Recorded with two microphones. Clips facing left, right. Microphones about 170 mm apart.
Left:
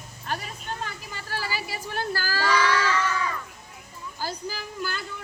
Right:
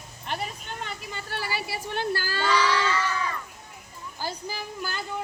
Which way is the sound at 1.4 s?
25° right (ahead or behind).